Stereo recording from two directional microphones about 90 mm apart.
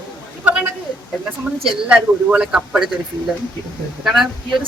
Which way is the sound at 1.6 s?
10° right (ahead or behind).